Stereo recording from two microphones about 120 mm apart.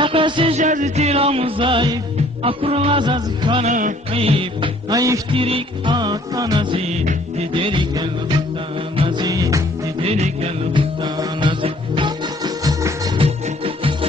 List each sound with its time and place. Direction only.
0.0 s music: 45° right (ahead or behind)
0.6 s music: 90° right; by 3.6 s 45° right (ahead or behind)
3.6 s music: 90° right
4.1 s music: 55° right (ahead or behind)
4.9 s music: 25° right (ahead or behind)
5.3 s music: 50° right (ahead or behind)
9.3 s music: 30° right (ahead or behind)
10.0 s music: 60° right (ahead or behind)
10.7 s music: 40° right (ahead or behind)